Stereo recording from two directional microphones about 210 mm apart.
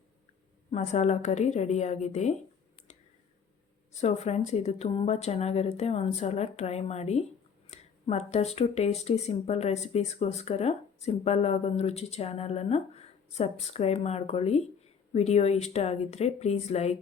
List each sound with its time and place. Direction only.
0.7 s speech: 35° left (ahead or behind)
3.9 s speech: 30° left (ahead or behind)